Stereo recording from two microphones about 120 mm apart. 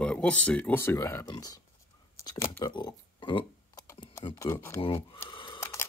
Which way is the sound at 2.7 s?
40° left (ahead or behind).